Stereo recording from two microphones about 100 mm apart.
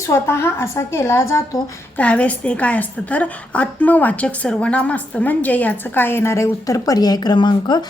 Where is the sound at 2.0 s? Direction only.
15° left (ahead or behind); by 7.8 s 50° left (ahead or behind).